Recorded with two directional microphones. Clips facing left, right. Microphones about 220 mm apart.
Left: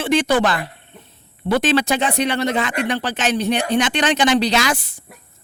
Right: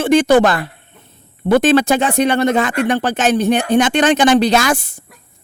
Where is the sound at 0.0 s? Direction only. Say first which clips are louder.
Right 6 dB; 45° right (ahead or behind).